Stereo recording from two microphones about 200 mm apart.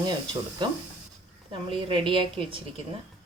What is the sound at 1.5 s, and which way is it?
Speech, 25° right (ahead or behind).